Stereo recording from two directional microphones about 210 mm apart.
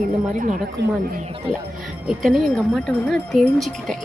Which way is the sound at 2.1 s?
Centre (ahead or behind).